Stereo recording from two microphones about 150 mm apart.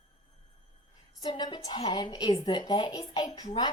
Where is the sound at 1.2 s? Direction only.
30° left (ahead or behind).